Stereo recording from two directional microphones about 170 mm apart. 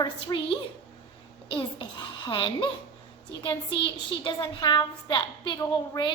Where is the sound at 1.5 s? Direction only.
30° left (ahead or behind).